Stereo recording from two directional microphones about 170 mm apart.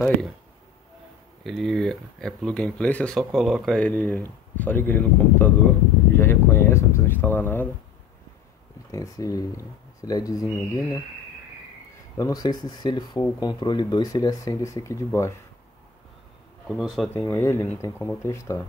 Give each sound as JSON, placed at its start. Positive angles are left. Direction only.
{"t": 1.4, "sound": "speech", "side_deg": 0}
{"t": 8.9, "sound": "speech", "side_deg": 20}
{"t": 12.2, "sound": "speech", "side_deg": 20}
{"t": 16.6, "sound": "speech", "side_deg": 0}